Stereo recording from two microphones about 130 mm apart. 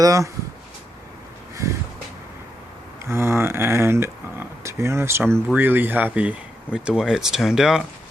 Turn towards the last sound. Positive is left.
turn(degrees=-5)  # may be behind; listen again after turning